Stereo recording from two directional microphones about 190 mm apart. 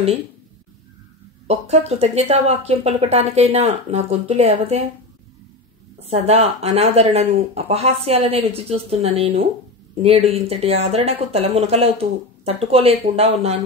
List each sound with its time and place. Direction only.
1.5 s speech: 35° right (ahead or behind)
5.9 s speech: 35° right (ahead or behind)